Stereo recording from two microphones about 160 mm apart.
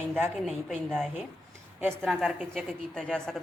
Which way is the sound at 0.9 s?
5° left (ahead or behind).